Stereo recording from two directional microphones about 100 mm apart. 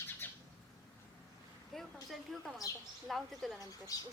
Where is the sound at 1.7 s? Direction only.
Centre (ahead or behind).